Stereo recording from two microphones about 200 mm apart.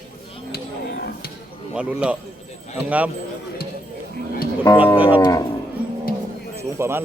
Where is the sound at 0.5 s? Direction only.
50° left (ahead or behind).